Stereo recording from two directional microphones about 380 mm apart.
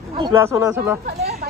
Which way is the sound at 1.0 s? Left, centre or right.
Centre.